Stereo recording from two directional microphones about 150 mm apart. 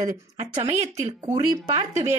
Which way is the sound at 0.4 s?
45° right (ahead or behind).